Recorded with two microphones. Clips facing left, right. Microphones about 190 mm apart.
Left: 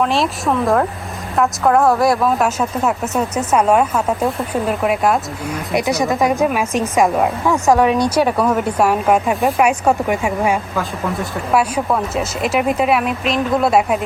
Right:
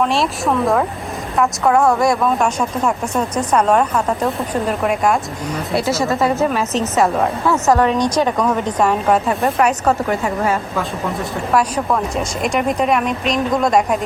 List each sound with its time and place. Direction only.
0.0 s a woman's voice: centre (ahead or behind)